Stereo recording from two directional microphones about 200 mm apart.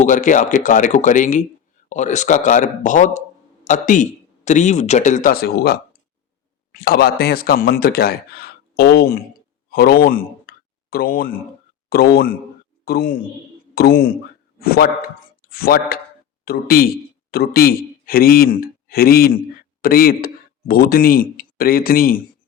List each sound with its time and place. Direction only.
0.0 s speech: 40° left (ahead or behind)
9.6 s a sound: 50° left (ahead or behind)
11.9 s speech: 50° left (ahead or behind)